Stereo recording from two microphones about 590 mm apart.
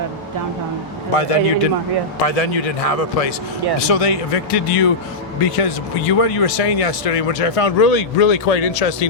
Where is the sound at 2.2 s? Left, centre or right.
Left.